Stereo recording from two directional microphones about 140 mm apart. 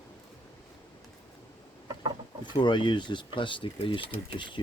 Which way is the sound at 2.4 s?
35° left (ahead or behind).